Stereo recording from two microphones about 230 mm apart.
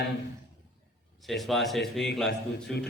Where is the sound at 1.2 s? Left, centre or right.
Centre.